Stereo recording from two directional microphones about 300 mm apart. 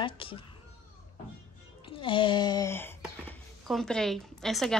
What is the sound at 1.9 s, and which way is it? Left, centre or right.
A woman's voice, centre.